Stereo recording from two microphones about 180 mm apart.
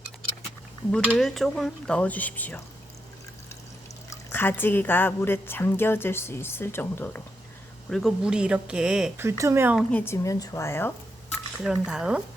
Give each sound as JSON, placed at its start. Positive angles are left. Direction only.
{"t": 1.0, "sound": "speech", "side_deg": 0}
{"t": 4.1, "sound": "speech", "side_deg": 10}
{"t": 7.9, "sound": "speech", "side_deg": 0}
{"t": 9.2, "sound": "speech", "side_deg": -15}
{"t": 9.7, "sound": "speech", "side_deg": 10}
{"t": 11.3, "sound": "speech", "side_deg": -5}